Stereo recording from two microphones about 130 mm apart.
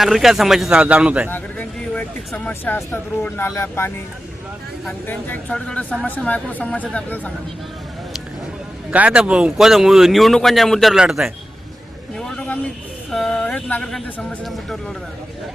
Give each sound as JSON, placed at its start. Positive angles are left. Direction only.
{"t": 0.0, "sound": "speech", "side_deg": 0}
{"t": 1.3, "sound": "speech", "side_deg": 10}
{"t": 5.0, "sound": "speech", "side_deg": 10}
{"t": 8.9, "sound": "speech", "side_deg": -10}
{"t": 12.1, "sound": "vehicle", "side_deg": 5}
{"t": 13.1, "sound": "speech", "side_deg": 5}